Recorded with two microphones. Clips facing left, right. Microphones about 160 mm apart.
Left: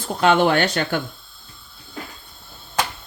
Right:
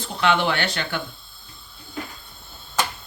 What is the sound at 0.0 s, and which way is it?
Speech, 45° left (ahead or behind).